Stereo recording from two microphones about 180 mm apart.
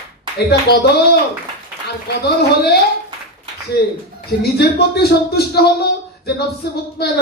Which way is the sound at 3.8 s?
65° left (ahead or behind).